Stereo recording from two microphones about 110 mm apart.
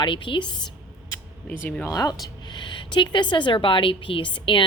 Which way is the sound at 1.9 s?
35° left (ahead or behind).